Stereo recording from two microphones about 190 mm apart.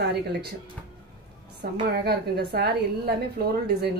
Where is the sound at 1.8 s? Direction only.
55° right (ahead or behind).